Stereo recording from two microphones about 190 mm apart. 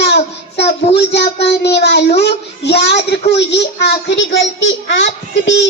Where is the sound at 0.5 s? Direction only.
60° left (ahead or behind).